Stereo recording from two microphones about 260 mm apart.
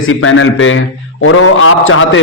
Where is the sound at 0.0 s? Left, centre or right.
Left.